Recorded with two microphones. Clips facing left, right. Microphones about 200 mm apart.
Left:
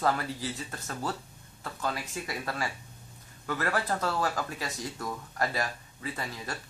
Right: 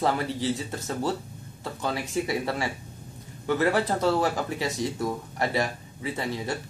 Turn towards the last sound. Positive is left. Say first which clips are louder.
# right 7 dB
turn(degrees=-25)  # may be behind; listen again after turning